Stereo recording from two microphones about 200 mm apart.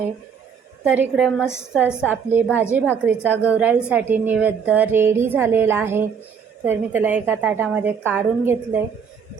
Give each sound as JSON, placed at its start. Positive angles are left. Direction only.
{"t": 0.9, "sound": "a woman's voice", "side_deg": -5}